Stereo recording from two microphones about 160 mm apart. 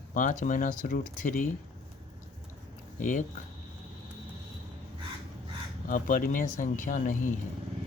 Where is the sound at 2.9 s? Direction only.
55° left (ahead or behind).